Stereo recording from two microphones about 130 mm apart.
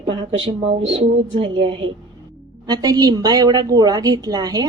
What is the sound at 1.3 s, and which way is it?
Speech, 40° right (ahead or behind).